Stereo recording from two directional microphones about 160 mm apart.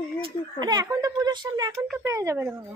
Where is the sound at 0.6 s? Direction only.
25° right (ahead or behind).